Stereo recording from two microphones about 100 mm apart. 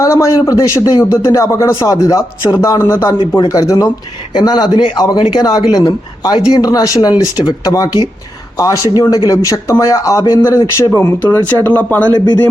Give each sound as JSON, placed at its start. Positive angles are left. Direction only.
{"t": 0.0, "sound": "a man's voice", "side_deg": 35}
{"t": 3.2, "sound": "speech", "side_deg": 50}
{"t": 3.5, "sound": "a man's voice", "side_deg": 35}